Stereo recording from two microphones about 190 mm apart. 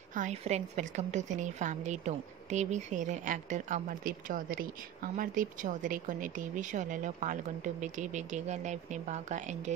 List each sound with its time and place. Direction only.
0.1 s a woman's voice: 40° right (ahead or behind)